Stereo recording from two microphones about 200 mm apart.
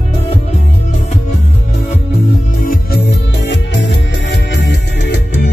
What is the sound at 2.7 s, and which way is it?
Music, 50° left (ahead or behind).